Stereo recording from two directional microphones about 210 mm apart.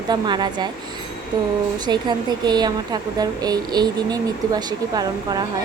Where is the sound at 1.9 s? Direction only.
20° right (ahead or behind).